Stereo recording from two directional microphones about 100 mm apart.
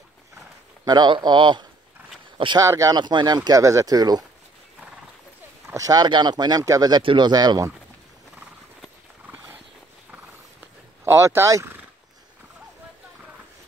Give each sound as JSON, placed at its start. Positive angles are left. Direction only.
{"t": 0.8, "sound": "speech", "side_deg": -50}
{"t": 2.6, "sound": "speech", "side_deg": -35}
{"t": 3.0, "sound": "speech", "side_deg": -50}
{"t": 5.8, "sound": "speech", "side_deg": -40}
{"t": 7.0, "sound": "speech", "side_deg": -55}
{"t": 11.1, "sound": "speech", "side_deg": -30}